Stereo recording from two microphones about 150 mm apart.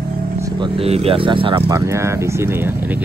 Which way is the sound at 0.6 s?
40° right (ahead or behind).